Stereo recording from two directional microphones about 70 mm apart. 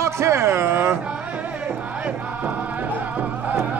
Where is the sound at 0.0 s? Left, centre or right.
Right.